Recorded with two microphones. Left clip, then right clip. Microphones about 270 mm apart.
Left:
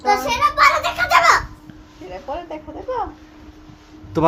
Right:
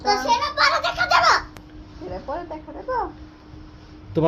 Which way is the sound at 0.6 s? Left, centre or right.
Left.